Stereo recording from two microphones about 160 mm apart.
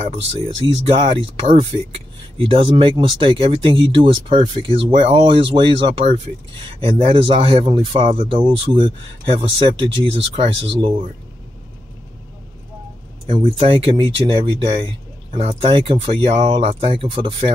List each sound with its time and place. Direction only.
0.8 s speech: 35° right (ahead or behind)
13.3 s speech: 35° right (ahead or behind)